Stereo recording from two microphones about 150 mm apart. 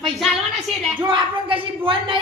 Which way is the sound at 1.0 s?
35° right (ahead or behind).